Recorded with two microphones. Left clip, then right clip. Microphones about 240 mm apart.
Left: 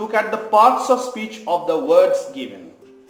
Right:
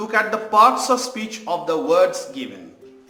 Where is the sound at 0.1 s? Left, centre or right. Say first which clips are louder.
Left 1 dB; right.